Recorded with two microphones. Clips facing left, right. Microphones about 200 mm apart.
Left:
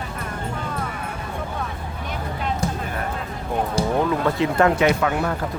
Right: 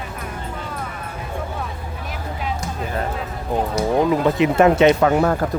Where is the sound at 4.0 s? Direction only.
20° right (ahead or behind).